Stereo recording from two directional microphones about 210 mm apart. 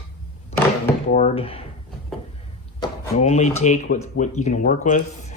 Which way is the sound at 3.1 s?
30° left (ahead or behind).